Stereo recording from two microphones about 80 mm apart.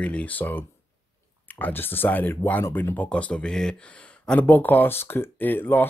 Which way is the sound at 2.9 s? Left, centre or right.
Centre.